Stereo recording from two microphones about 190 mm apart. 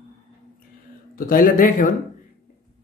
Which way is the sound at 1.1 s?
50° left (ahead or behind).